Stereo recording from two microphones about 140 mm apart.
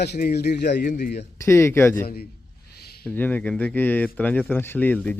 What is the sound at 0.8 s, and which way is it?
Speech, 75° left (ahead or behind).